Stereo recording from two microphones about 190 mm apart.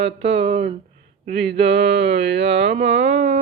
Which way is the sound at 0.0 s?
35° right (ahead or behind).